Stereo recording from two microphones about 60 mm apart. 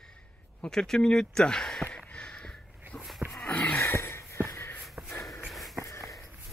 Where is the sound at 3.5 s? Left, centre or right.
Left.